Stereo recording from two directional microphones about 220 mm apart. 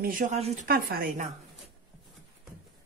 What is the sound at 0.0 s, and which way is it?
A woman's voice, 35° right (ahead or behind).